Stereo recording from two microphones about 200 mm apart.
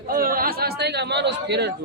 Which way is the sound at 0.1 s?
45° right (ahead or behind).